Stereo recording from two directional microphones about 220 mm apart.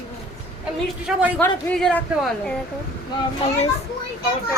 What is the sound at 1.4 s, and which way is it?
Speech, 5° left (ahead or behind).